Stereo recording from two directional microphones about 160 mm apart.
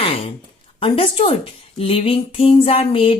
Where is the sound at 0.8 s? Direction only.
35° left (ahead or behind).